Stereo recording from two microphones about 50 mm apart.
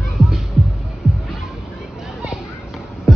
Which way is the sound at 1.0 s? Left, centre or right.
Centre.